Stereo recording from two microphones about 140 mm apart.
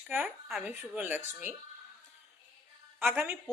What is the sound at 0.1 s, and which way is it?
A woman's voice, 15° right (ahead or behind).